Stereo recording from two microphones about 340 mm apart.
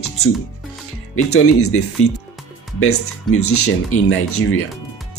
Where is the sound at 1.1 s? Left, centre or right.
Left.